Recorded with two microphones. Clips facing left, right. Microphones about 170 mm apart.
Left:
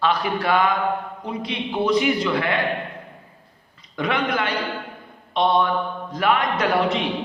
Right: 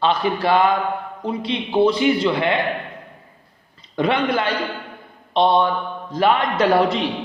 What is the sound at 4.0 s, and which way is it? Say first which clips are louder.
A man's voice: right 4 dB; 30° right (ahead or behind).